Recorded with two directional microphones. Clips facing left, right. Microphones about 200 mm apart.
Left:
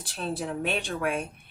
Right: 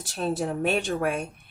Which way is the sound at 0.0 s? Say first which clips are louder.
Right 5 dB; 45° right (ahead or behind).